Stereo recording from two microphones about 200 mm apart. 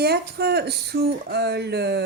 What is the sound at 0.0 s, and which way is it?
A woman's voice, 50° right (ahead or behind).